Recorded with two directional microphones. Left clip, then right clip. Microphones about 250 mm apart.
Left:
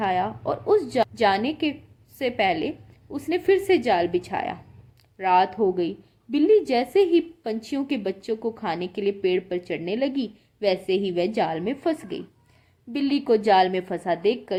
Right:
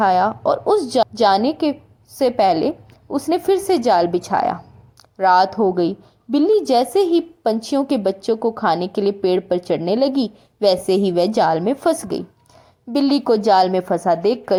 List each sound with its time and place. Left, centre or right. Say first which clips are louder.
0.0 s a woman's voice: right 9 dB; right